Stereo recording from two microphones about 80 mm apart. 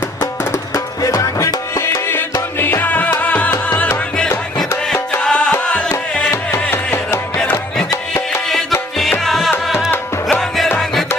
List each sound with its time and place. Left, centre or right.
0.7 s music: left
5.2 s music: centre
6.3 s music: left
9.2 s music: centre
9.9 s music: left